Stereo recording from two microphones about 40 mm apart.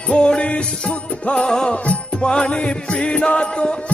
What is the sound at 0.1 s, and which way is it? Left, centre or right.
Music, left.